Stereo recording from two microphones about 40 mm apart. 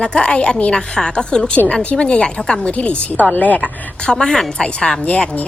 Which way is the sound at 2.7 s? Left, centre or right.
Left.